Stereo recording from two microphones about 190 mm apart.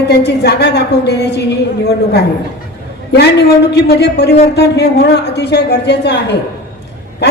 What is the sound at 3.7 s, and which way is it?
A woman's voice, 60° left (ahead or behind).